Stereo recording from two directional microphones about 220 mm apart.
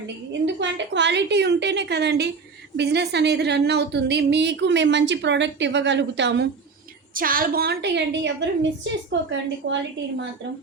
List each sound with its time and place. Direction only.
0.4 s a woman's voice: 55° right (ahead or behind)
7.1 s a woman's voice: 40° right (ahead or behind)